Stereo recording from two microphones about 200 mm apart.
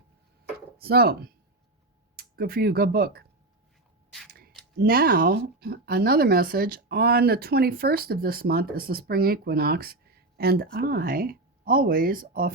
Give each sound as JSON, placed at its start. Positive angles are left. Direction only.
{"t": 0.8, "sound": "speech", "side_deg": -50}
{"t": 4.3, "sound": "a sound", "side_deg": -50}
{"t": 4.8, "sound": "speech", "side_deg": -50}